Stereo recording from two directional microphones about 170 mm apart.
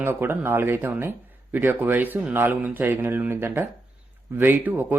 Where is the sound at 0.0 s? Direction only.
15° right (ahead or behind).